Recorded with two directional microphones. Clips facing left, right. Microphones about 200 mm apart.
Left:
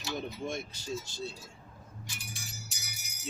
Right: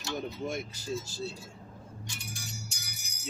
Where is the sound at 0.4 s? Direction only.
5° right (ahead or behind).